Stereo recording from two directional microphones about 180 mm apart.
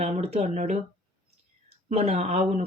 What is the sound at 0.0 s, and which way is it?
Speech, 35° right (ahead or behind).